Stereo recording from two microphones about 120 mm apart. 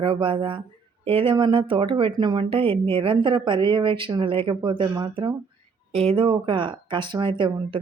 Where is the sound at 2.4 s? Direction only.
50° right (ahead or behind); by 5.3 s 35° right (ahead or behind).